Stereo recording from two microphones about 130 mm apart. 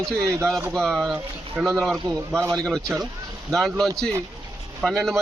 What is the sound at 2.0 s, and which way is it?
Speech, 35° right (ahead or behind).